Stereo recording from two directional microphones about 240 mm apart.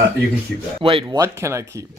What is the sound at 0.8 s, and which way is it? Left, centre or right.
Speech, right.